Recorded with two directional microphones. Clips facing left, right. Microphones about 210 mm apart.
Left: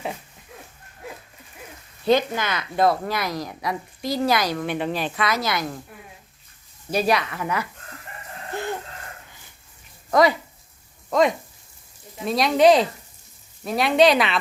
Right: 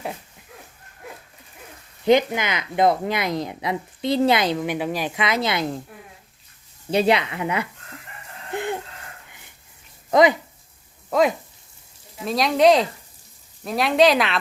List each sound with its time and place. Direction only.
2.0 s speech: 15° right (ahead or behind)
5.2 s speech: 25° right (ahead or behind)
6.9 s speech: 25° right (ahead or behind)
8.5 s a sound: 15° right (ahead or behind)
10.1 s speech: 20° right (ahead or behind)
11.1 s speech: 5° right (ahead or behind)